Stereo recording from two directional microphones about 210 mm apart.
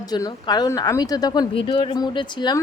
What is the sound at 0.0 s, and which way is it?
Speech, 20° left (ahead or behind).